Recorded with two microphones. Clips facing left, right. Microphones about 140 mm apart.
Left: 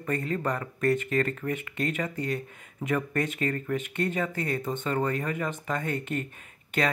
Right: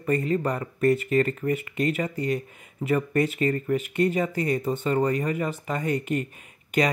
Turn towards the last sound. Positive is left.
turn(degrees=-10)  # may be behind; listen again after turning